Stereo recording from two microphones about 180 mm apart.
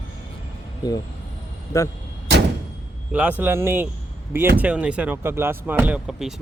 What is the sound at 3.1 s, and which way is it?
Speech, 10° right (ahead or behind).